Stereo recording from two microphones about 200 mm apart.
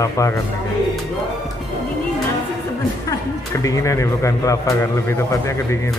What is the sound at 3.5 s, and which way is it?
A man's voice, 15° left (ahead or behind).